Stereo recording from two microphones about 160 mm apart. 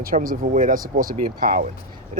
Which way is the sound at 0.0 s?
60° right (ahead or behind).